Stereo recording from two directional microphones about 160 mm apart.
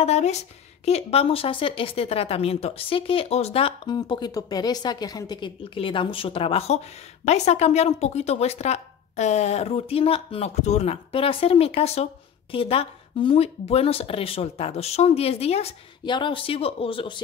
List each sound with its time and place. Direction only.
0.0 s a woman's voice: 45° left (ahead or behind)